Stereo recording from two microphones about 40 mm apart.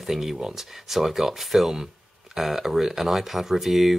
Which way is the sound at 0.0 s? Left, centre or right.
Centre.